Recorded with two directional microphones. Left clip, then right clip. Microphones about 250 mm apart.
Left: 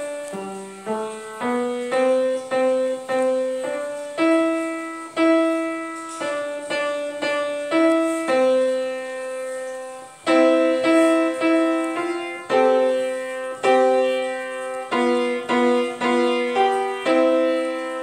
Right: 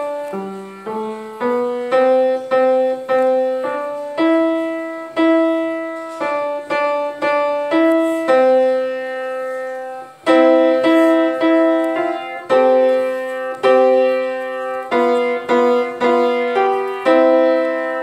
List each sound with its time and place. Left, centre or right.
1.4 s music: right
7.2 s music: right
10.2 s music: right